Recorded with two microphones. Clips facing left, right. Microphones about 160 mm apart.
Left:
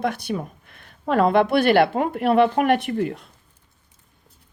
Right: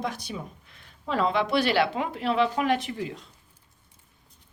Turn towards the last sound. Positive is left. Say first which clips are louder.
# left 9 dB
turn(degrees=60)  # may be behind; listen again after turning